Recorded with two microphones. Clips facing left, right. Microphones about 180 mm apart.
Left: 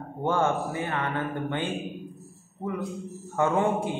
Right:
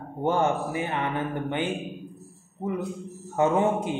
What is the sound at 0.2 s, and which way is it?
Speech, 20° right (ahead or behind).